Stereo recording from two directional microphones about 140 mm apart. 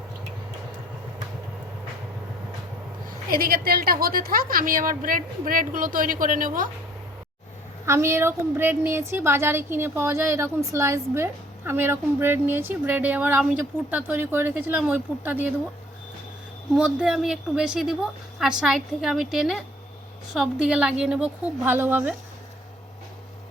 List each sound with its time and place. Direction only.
3.1 s a woman's voice: 90° right; by 6.7 s 70° right (ahead or behind)
7.9 s a woman's voice: 20° right (ahead or behind)
16.7 s a woman's voice: 5° right (ahead or behind)